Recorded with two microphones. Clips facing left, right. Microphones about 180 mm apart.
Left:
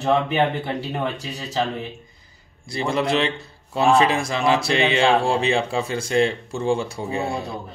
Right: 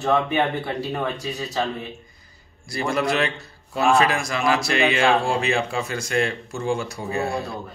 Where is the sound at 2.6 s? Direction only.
25° left (ahead or behind).